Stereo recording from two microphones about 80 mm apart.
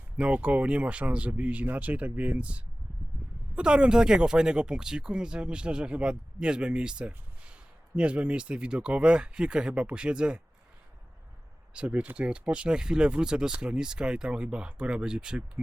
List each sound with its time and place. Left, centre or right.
0.2 s speech: centre
11.7 s speech: centre